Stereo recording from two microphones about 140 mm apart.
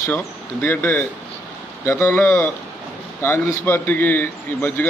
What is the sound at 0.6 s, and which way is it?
A man's voice, 20° left (ahead or behind).